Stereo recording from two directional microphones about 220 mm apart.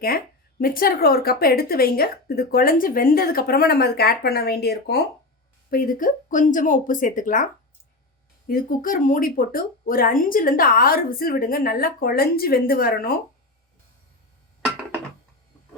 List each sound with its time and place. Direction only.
0.6 s a woman's voice: 40° left (ahead or behind)
8.4 s speech: 40° left (ahead or behind)